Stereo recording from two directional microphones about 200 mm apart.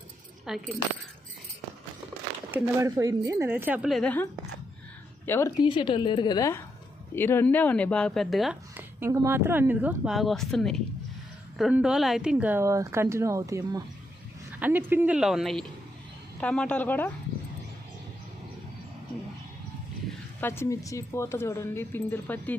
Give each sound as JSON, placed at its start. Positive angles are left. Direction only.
{"t": 0.4, "sound": "speech", "side_deg": 0}
{"t": 2.5, "sound": "speech", "side_deg": -10}
{"t": 9.0, "sound": "a woman's voice", "side_deg": -15}
{"t": 20.4, "sound": "a woman's voice", "side_deg": 10}